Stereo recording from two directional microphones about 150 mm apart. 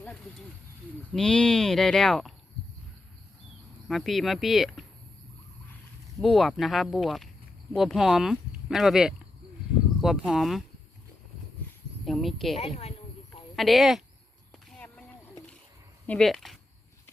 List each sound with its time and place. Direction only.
1.1 s speech: 5° left (ahead or behind)
3.8 s speech: centre (ahead or behind)
6.1 s speech: centre (ahead or behind)
12.0 s speech: centre (ahead or behind)
12.5 s a woman's voice: 45° left (ahead or behind)
13.6 s speech: centre (ahead or behind)
14.7 s a sound: 10° left (ahead or behind)
16.0 s speech: 5° left (ahead or behind)